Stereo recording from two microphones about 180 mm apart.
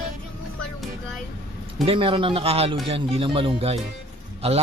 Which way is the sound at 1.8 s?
30° right (ahead or behind).